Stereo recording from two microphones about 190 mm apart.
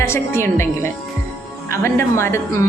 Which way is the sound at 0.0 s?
15° left (ahead or behind).